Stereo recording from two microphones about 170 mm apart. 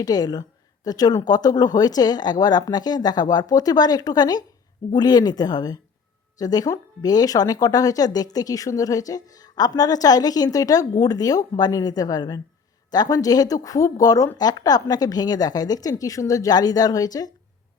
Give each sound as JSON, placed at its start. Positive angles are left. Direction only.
{"t": 0.0, "sound": "speech", "side_deg": 25}